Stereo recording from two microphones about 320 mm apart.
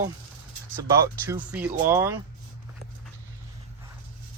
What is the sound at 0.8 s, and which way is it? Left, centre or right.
Speech, centre.